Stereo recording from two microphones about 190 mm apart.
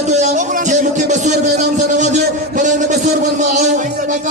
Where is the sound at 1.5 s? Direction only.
40° right (ahead or behind).